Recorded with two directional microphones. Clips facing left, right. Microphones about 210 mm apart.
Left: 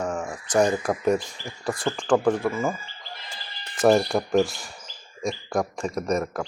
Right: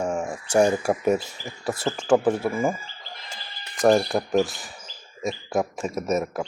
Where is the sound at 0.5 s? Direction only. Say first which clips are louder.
Right 2 dB; 10° right (ahead or behind).